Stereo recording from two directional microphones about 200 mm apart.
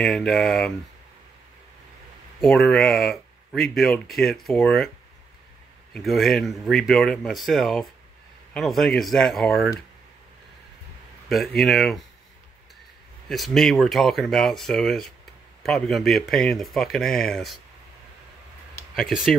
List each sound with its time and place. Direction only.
0.0 s speech: centre (ahead or behind)
2.4 s speech: centre (ahead or behind)
5.9 s speech: centre (ahead or behind)
11.2 s speech: centre (ahead or behind)
13.3 s speech: centre (ahead or behind)
18.9 s speech: centre (ahead or behind)